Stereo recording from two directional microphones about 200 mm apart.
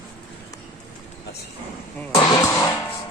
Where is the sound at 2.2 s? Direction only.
15° left (ahead or behind).